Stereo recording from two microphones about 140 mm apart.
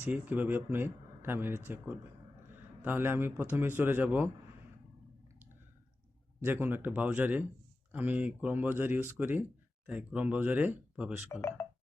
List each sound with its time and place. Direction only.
0.0 s speech: 15° right (ahead or behind)
6.4 s speech: 15° right (ahead or behind)
11.3 s speech: 20° left (ahead or behind)